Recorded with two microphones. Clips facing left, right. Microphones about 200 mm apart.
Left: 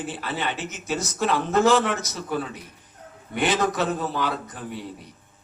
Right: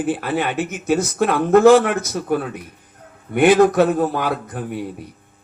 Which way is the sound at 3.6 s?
55° right (ahead or behind).